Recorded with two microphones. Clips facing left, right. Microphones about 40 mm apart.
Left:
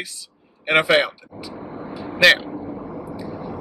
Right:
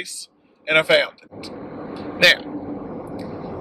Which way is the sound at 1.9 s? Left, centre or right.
Centre.